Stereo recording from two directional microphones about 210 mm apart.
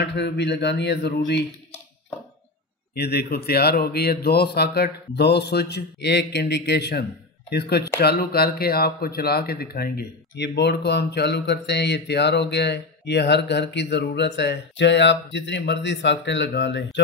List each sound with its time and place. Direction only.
0.0 s a man's voice: 55° left (ahead or behind)
2.9 s a man's voice: 50° left (ahead or behind)